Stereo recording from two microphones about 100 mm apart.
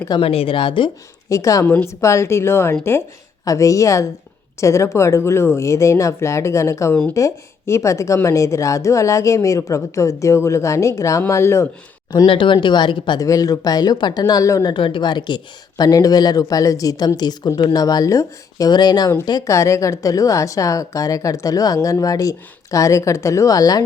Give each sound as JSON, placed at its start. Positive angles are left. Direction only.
{"t": 0.2, "sound": "a woman's voice", "side_deg": 70}
{"t": 1.3, "sound": "a woman's voice", "side_deg": 35}
{"t": 12.2, "sound": "speech", "side_deg": 60}
{"t": 13.1, "sound": "a woman's voice", "side_deg": 35}
{"t": 14.6, "sound": "speech", "side_deg": 55}
{"t": 15.8, "sound": "a woman's voice", "side_deg": 40}
{"t": 19.5, "sound": "a woman's voice", "side_deg": 30}